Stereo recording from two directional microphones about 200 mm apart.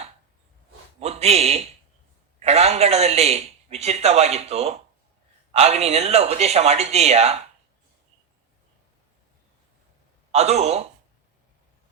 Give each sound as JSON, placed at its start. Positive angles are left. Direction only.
{"t": 0.9, "sound": "a sound", "side_deg": -30}
{"t": 2.4, "sound": "speech", "side_deg": -30}
{"t": 10.3, "sound": "speech", "side_deg": -30}